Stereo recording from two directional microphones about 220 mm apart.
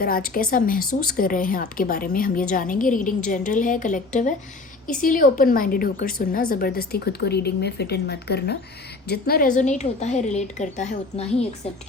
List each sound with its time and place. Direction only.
0.0 s a woman's voice: 40° left (ahead or behind)